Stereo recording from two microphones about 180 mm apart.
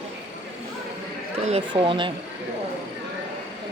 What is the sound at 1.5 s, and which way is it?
Speech, 30° right (ahead or behind).